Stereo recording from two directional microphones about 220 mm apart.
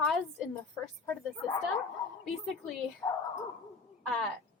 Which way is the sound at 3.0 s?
20° left (ahead or behind).